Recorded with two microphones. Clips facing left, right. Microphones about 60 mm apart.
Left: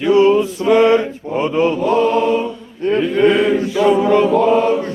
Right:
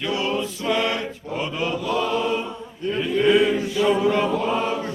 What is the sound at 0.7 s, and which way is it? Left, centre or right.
Mantra, left.